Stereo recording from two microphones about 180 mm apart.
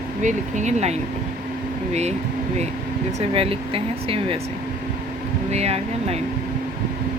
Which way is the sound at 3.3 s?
30° right (ahead or behind).